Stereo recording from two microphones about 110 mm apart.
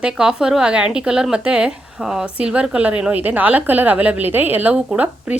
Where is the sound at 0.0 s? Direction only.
5° right (ahead or behind).